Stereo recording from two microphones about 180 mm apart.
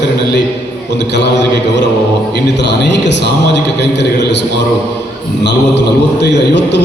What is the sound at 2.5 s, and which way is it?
A man's voice, 75° left (ahead or behind).